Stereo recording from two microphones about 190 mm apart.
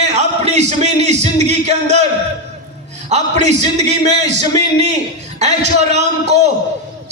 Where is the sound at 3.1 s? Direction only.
35° right (ahead or behind).